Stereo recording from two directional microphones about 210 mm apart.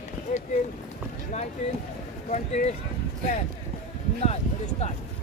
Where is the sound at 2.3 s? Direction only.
35° left (ahead or behind).